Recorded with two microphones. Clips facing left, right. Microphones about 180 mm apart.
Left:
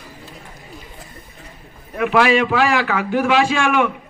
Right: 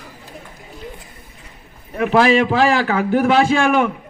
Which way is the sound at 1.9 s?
35° right (ahead or behind).